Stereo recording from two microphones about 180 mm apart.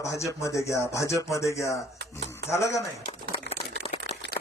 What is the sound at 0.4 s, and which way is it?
Speech, 15° left (ahead or behind).